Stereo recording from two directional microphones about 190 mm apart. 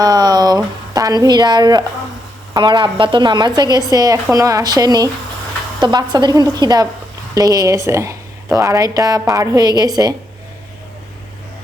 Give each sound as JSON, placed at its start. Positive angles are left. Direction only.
{"t": 0.0, "sound": "speech", "side_deg": -20}